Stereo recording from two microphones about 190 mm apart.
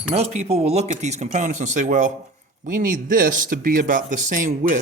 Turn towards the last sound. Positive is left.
turn(degrees=-40)  # may be behind; listen again after turning